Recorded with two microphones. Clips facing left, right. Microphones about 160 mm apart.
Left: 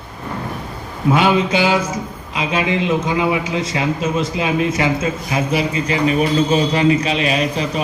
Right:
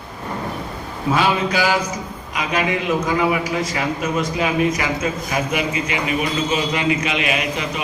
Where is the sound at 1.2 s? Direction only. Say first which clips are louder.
Left 3 dB; 25° left (ahead or behind).